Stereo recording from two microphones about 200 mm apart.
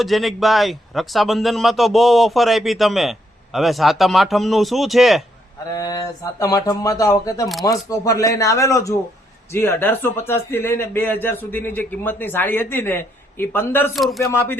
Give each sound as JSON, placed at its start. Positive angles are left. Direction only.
{"t": 0.0, "sound": "a man's voice", "side_deg": 0}
{"t": 5.7, "sound": "speech", "side_deg": 15}
{"t": 13.9, "sound": "a man's voice", "side_deg": 0}
{"t": 14.3, "sound": "speech", "side_deg": 10}